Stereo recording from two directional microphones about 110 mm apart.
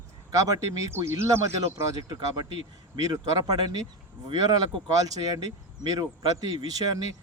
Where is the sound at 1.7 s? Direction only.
35° right (ahead or behind).